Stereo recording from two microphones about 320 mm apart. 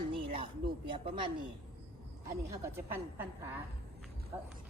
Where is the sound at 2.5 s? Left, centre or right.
Centre.